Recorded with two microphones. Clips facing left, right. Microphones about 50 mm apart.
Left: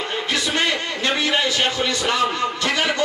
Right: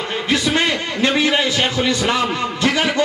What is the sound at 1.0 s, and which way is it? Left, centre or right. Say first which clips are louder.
Speech: right 4 dB; centre.